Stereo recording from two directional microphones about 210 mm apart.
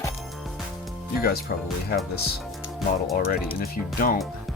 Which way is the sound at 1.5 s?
50° left (ahead or behind).